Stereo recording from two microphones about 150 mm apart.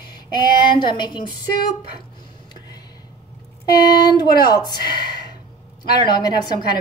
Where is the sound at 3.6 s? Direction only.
25° left (ahead or behind).